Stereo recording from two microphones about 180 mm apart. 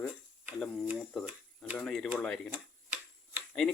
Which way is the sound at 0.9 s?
5° right (ahead or behind).